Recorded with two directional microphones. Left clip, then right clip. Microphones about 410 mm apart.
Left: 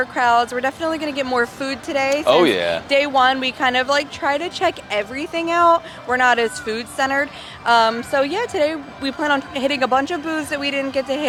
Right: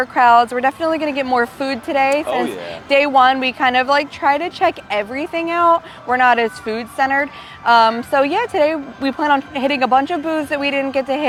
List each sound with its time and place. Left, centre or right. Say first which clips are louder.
0.0 s speech: right 5 dB; right
2.2 s speech: left 6 dB; left
2.9 s speech: right 5 dB; right